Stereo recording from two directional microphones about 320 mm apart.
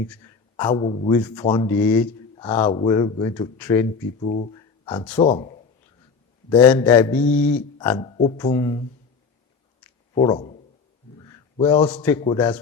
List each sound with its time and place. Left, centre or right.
0.2 s speech: centre
4.3 s speech: left
10.2 s a man's voice: centre